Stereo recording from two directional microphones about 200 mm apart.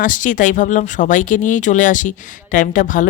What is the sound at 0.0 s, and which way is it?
Speech, 40° left (ahead or behind).